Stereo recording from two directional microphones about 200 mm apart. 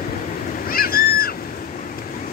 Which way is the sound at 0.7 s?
45° left (ahead or behind).